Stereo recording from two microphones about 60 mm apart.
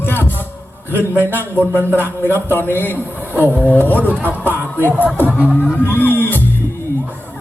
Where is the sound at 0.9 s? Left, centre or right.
Right.